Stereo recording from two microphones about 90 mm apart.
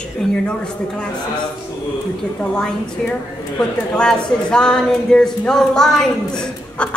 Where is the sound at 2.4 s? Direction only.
10° left (ahead or behind).